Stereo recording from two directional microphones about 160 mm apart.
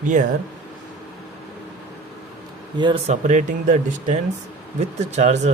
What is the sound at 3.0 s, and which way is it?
Speech, 50° right (ahead or behind).